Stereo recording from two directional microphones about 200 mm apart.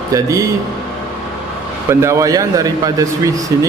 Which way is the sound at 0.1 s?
15° right (ahead or behind).